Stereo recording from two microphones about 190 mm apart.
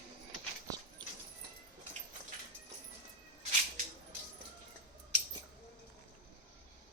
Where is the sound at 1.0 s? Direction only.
20° right (ahead or behind).